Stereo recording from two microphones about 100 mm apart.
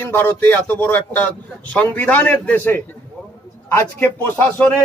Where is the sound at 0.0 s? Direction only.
25° left (ahead or behind).